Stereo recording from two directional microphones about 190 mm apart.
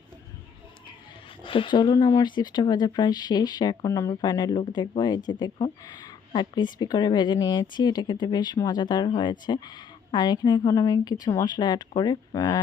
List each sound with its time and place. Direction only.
1.5 s speech: 25° left (ahead or behind)